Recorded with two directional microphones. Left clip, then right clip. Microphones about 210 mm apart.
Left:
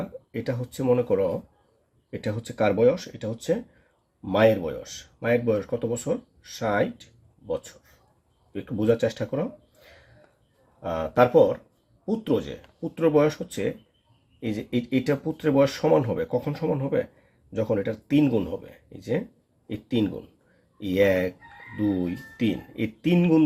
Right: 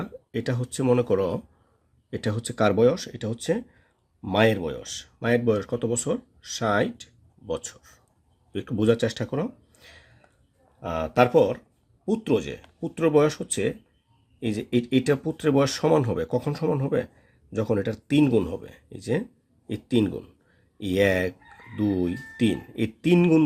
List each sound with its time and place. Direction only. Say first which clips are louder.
0.4 s speech: even; 40° right (ahead or behind)
10.8 s speech: left 1 dB; 35° right (ahead or behind)
23.0 s speech: right 2 dB; 40° right (ahead or behind)